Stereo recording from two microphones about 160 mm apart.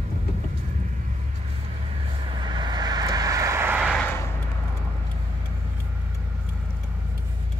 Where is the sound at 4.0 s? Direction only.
15° left (ahead or behind).